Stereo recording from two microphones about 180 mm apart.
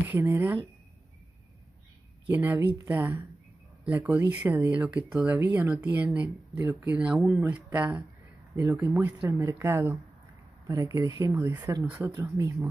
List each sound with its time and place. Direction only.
0.1 s speech: 15° right (ahead or behind)
2.2 s speech: 10° right (ahead or behind)